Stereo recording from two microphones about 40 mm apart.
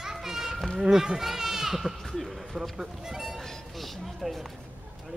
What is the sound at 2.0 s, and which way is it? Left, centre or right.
Speech, centre.